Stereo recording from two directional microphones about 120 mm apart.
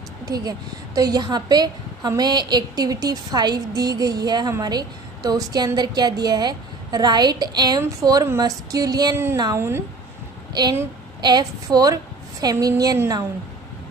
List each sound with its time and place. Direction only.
0.3 s a woman's voice: 30° right (ahead or behind)
9.1 s speech: 20° right (ahead or behind)
10.5 s a woman's voice: 35° right (ahead or behind)